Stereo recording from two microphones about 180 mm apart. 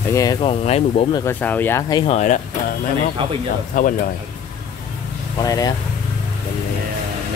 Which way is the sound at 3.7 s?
50° left (ahead or behind).